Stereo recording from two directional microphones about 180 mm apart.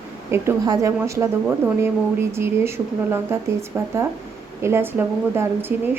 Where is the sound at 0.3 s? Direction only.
15° right (ahead or behind).